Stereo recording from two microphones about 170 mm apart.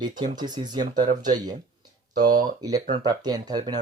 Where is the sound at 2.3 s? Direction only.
50° right (ahead or behind).